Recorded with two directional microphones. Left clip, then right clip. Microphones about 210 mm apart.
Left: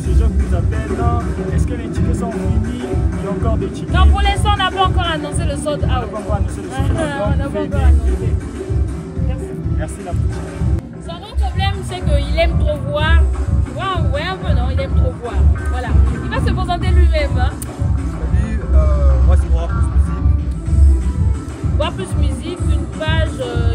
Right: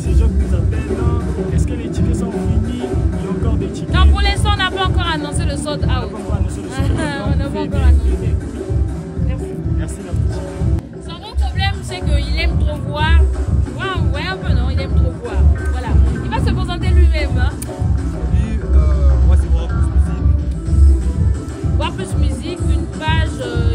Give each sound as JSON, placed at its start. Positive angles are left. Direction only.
{"t": 1.1, "sound": "speech", "side_deg": 0}
{"t": 2.1, "sound": "speech", "side_deg": 30}
{"t": 3.9, "sound": "speech", "side_deg": -15}
{"t": 7.5, "sound": "speech", "side_deg": 0}
{"t": 11.6, "sound": "speech", "side_deg": -10}
{"t": 22.5, "sound": "speech", "side_deg": -10}